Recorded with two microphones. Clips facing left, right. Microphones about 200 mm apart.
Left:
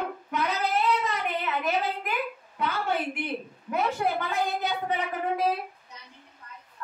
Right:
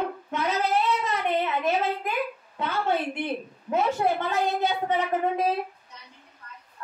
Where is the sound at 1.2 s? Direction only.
25° right (ahead or behind).